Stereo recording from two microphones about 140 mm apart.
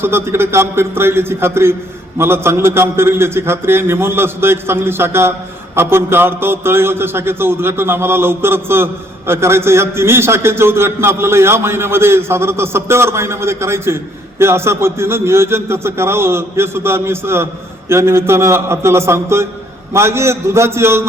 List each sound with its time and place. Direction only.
0.0 s a man's voice: 15° right (ahead or behind)